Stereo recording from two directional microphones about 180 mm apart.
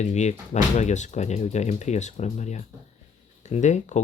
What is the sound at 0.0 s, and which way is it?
Speech, 40° left (ahead or behind).